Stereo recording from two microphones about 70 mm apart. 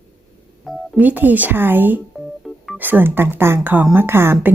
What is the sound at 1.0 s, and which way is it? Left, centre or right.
A woman's voice, right.